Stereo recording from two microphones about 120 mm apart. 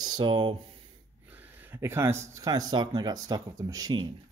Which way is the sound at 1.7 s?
20° right (ahead or behind).